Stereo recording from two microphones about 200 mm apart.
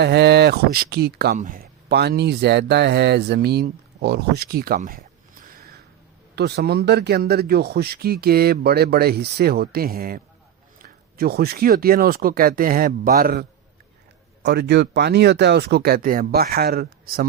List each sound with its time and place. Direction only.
0.0 s speech: 55° right (ahead or behind)
11.2 s speech: 50° right (ahead or behind)
14.4 s speech: 55° right (ahead or behind)